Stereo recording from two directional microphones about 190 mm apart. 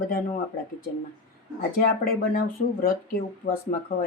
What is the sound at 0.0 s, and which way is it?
Speech, 45° left (ahead or behind).